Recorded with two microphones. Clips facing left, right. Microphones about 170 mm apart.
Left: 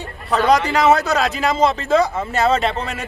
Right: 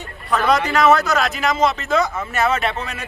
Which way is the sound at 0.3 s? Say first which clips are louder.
Left 2 dB; 30° left (ahead or behind).